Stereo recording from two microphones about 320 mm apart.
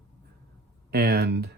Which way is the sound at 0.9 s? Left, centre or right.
Right.